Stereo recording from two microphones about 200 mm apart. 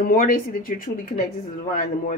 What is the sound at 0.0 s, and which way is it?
Speech, 45° left (ahead or behind).